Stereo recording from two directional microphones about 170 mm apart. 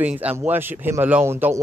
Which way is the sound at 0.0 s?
10° right (ahead or behind).